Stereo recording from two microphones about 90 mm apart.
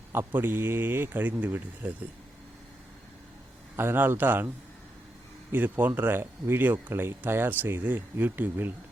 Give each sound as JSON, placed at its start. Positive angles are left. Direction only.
{"t": 0.1, "sound": "speech", "side_deg": -25}
{"t": 3.8, "sound": "speech", "side_deg": -25}